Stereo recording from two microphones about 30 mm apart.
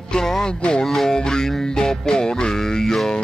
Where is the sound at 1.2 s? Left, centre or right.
Left.